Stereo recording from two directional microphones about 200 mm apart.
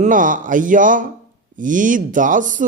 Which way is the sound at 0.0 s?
40° right (ahead or behind).